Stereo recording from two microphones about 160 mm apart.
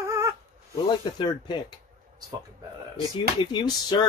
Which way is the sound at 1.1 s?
30° left (ahead or behind).